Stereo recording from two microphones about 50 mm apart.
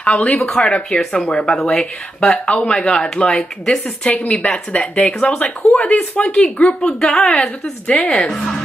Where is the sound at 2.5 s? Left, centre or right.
Left.